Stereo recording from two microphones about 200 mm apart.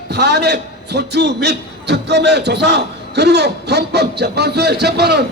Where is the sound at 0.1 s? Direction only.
55° right (ahead or behind).